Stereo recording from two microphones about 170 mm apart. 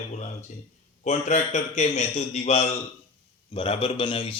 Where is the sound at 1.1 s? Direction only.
40° left (ahead or behind).